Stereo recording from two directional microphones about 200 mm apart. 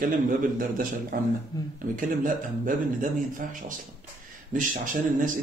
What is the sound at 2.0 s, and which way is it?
A man's voice, 40° right (ahead or behind).